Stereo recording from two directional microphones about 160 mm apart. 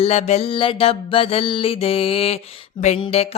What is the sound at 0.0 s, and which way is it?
Music, 45° left (ahead or behind).